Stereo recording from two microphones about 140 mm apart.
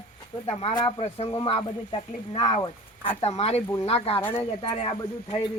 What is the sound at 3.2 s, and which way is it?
Speech, 50° left (ahead or behind).